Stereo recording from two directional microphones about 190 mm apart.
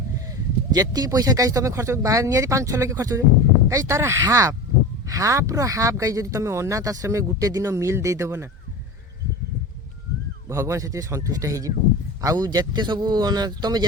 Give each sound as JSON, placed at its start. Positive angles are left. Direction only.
{"t": 0.3, "sound": "speech", "side_deg": -20}
{"t": 10.5, "sound": "speech", "side_deg": -15}